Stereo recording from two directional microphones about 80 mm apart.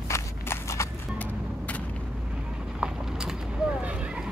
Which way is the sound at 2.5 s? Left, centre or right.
Centre.